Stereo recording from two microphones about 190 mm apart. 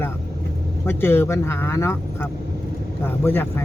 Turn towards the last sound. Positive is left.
turn(degrees=10)  # may be behind; listen again after turning